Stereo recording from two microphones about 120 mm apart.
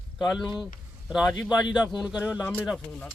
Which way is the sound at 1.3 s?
35° left (ahead or behind).